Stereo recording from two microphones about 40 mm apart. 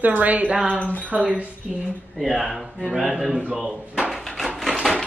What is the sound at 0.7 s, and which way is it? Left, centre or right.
Speech, left.